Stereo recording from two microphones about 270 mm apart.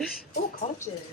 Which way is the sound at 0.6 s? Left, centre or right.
Left.